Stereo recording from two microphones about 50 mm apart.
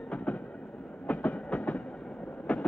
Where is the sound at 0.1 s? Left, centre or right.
Left.